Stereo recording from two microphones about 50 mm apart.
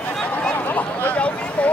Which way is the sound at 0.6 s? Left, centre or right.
Left.